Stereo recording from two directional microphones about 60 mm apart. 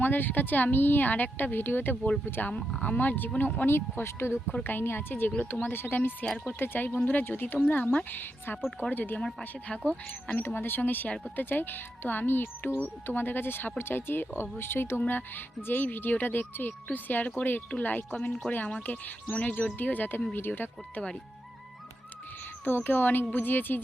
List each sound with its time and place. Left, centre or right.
0.0 s speech: left
10.4 s speech: left
22.6 s speech: left